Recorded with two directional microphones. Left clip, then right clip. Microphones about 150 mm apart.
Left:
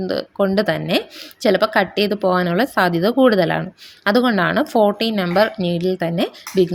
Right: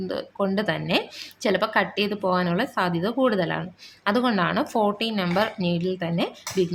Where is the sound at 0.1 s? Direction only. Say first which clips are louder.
Left 7 dB; 35° left (ahead or behind).